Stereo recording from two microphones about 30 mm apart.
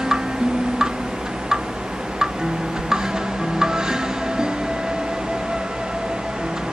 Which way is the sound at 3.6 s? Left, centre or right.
Right.